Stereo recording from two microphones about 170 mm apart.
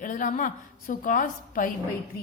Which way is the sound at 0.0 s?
50° left (ahead or behind).